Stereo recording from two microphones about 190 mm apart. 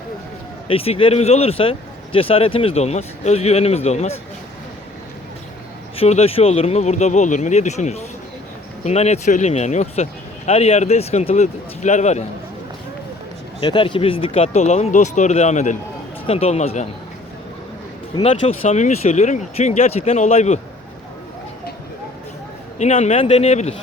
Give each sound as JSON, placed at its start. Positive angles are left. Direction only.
{"t": 0.7, "sound": "speech", "side_deg": 30}
{"t": 6.0, "sound": "speech", "side_deg": 35}
{"t": 13.6, "sound": "speech", "side_deg": 25}
{"t": 18.1, "sound": "speech", "side_deg": 30}
{"t": 22.8, "sound": "speech", "side_deg": 35}